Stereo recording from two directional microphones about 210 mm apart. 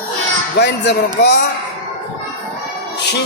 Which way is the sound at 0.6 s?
55° left (ahead or behind).